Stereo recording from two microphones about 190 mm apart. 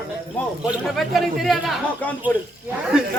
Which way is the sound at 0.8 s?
Centre (ahead or behind).